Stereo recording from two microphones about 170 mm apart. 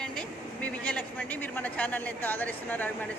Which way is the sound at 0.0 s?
5° left (ahead or behind).